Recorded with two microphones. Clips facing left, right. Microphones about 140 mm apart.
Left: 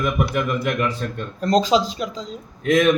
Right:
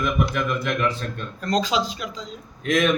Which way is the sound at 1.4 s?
35° left (ahead or behind).